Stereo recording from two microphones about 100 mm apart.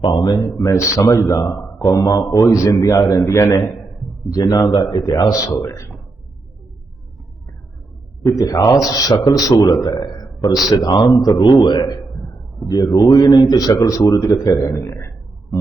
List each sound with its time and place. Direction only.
0.0 s speech: 45° left (ahead or behind); by 5.9 s 30° left (ahead or behind)
8.2 s speech: 35° left (ahead or behind)
9.8 s a sound: 40° left (ahead or behind)
10.7 s a man's voice: 45° left (ahead or behind)
11.9 s a sound: centre (ahead or behind)
12.6 s speech: 40° left (ahead or behind)